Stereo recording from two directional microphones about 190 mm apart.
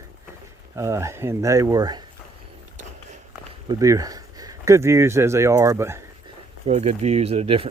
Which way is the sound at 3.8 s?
20° right (ahead or behind).